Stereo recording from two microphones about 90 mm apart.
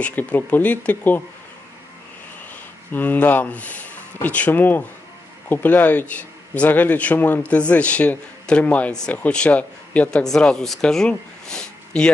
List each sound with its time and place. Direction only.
0.0 s a man's voice: 15° left (ahead or behind)
2.9 s a man's voice: 20° left (ahead or behind)